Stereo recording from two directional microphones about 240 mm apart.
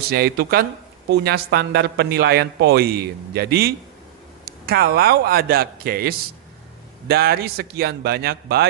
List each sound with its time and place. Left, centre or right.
0.1 s speech: right